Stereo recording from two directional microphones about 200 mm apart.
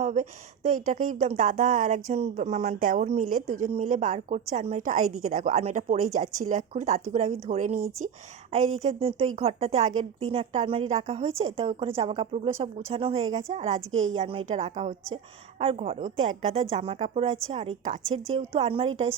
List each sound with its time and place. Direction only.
0.0 s a woman's voice: 35° right (ahead or behind)
8.8 s a woman's voice: 30° right (ahead or behind)
13.9 s a woman's voice: 85° right
14.2 s a woman's voice: 30° right (ahead or behind)